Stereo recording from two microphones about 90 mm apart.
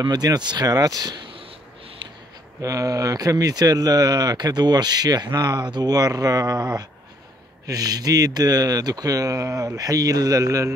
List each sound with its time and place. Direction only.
0.0 s speech: 50° right (ahead or behind)
2.6 s speech: 40° right (ahead or behind)
7.6 s speech: 45° right (ahead or behind)